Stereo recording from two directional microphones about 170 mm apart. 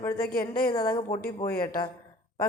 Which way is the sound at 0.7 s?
20° left (ahead or behind).